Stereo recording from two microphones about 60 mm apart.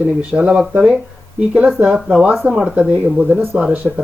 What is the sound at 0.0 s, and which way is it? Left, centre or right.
Speech, right.